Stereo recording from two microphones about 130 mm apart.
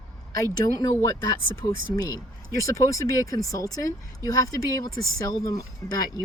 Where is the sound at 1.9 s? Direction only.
25° left (ahead or behind).